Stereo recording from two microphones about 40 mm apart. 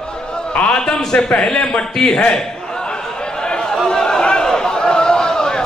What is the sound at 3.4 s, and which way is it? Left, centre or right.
Chatter, centre.